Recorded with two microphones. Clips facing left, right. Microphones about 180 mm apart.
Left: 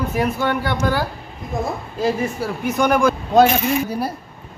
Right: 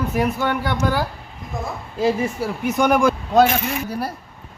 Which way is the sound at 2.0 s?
20° right (ahead or behind).